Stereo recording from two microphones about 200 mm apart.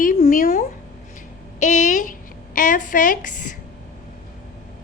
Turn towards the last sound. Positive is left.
turn(degrees=40)  # may be behind; listen again after turning